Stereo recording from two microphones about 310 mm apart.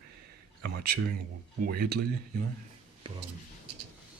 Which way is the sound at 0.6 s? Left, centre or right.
Right.